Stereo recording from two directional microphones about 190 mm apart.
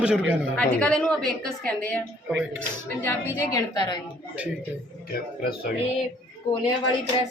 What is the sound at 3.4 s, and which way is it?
Speech, 20° left (ahead or behind).